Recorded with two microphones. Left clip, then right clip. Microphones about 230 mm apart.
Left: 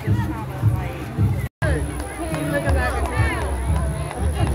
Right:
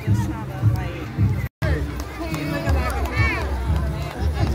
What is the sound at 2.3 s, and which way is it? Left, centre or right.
Music, right.